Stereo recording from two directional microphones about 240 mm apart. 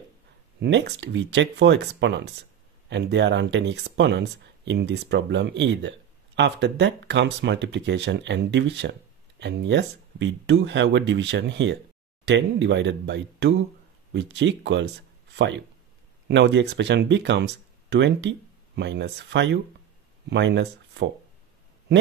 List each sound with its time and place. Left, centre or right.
0.6 s speech: right